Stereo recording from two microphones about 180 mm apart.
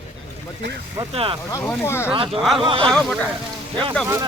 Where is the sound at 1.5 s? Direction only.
15° left (ahead or behind).